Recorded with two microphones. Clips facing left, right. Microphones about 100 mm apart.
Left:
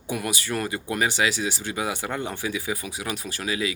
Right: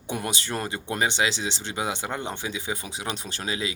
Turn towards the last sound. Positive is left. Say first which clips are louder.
# left 3 dB
turn(degrees=-25)  # may be behind; listen again after turning